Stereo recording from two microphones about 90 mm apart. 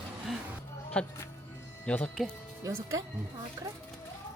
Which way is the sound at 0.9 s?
15° left (ahead or behind).